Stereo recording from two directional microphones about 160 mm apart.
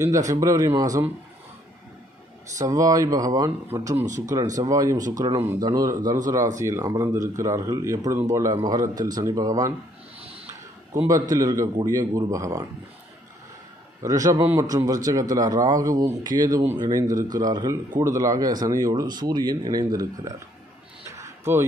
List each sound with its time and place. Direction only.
0.0 s a man's voice: 20° right (ahead or behind)
2.6 s a man's voice: 20° right (ahead or behind)
5.4 s a man's voice: 15° right (ahead or behind)
10.2 s a sound: 40° right (ahead or behind)
11.2 s a man's voice: 20° right (ahead or behind)
14.0 s a man's voice: 20° right (ahead or behind)
21.1 s a sound: 20° right (ahead or behind)